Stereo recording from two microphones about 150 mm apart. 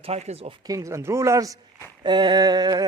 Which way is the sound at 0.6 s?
20° right (ahead or behind).